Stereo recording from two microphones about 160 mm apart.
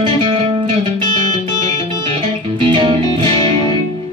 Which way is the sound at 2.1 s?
30° right (ahead or behind).